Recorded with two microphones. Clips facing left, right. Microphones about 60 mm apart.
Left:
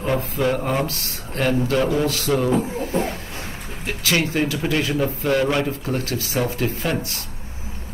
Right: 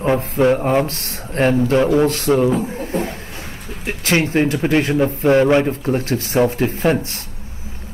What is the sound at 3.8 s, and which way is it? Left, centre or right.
A man's voice, right.